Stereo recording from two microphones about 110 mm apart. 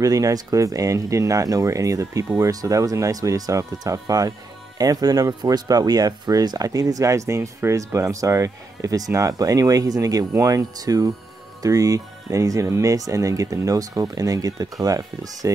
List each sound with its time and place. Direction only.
0.0 s speech: 30° right (ahead or behind)